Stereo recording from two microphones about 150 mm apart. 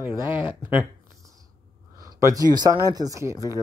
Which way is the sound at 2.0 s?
20° right (ahead or behind).